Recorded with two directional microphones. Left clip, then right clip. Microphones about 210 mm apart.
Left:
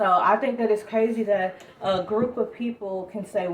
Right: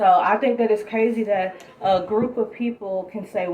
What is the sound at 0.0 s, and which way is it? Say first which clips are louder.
Speech: right 3 dB; 20° left (ahead or behind).